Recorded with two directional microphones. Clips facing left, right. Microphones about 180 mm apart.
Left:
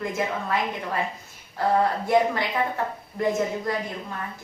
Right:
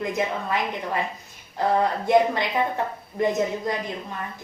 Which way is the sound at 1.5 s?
20° right (ahead or behind).